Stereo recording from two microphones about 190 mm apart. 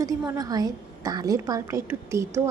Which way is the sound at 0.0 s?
20° right (ahead or behind).